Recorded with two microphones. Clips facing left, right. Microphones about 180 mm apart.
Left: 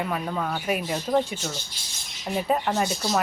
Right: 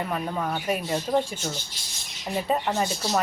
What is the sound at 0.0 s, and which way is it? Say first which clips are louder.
Speech: even; 5° left (ahead or behind).